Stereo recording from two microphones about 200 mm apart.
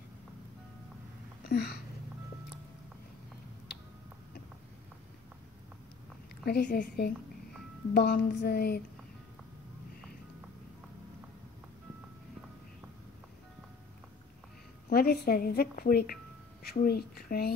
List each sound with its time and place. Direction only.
1.5 s a woman's voice: 50° left (ahead or behind)
6.4 s a woman's voice: 55° left (ahead or behind)
14.9 s a woman's voice: 50° left (ahead or behind)